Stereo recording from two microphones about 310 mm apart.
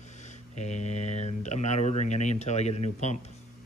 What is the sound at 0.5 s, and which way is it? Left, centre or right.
Speech, left.